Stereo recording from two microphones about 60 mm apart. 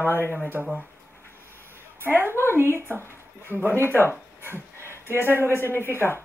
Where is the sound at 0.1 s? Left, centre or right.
Left.